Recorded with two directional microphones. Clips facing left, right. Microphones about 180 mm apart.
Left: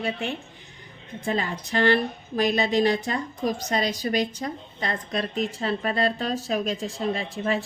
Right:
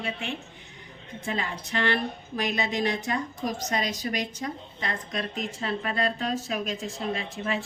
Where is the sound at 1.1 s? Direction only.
35° left (ahead or behind).